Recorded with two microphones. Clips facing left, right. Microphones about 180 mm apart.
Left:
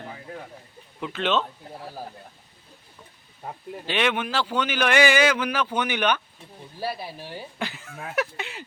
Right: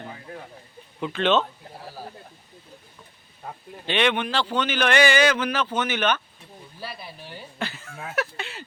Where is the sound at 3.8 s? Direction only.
5° left (ahead or behind).